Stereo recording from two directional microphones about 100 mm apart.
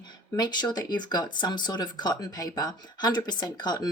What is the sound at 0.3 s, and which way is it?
A woman's voice, 45° left (ahead or behind).